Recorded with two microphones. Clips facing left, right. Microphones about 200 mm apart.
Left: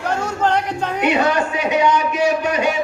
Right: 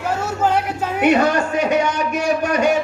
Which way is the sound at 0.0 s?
5° right (ahead or behind).